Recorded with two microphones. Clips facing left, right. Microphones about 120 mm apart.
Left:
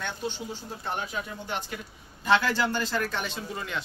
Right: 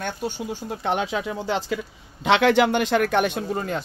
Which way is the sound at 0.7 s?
85° right.